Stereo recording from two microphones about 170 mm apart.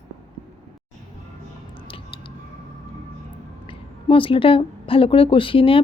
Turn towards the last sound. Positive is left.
turn(degrees=30)  # may be behind; listen again after turning